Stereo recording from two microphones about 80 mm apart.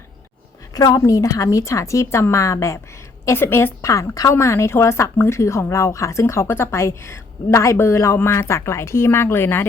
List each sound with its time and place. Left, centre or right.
0.9 s speech: left